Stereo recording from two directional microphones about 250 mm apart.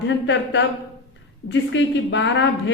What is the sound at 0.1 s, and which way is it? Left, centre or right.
A woman's voice, left.